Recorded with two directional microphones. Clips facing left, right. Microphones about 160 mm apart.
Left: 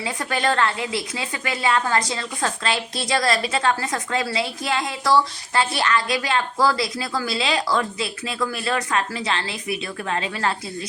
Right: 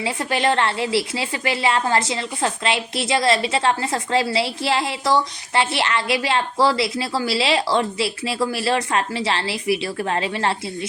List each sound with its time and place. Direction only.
0.0 s a woman's voice: 25° right (ahead or behind)